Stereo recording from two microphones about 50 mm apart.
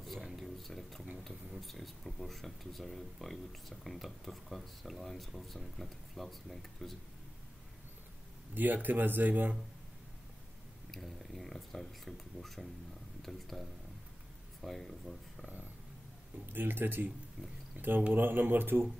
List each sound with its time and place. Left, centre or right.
0.0 s a sound: centre
1.1 s speech: centre
8.5 s speech: right
10.9 s speech: centre
16.5 s speech: right